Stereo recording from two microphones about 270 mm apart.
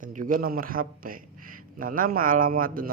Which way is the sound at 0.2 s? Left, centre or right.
Right.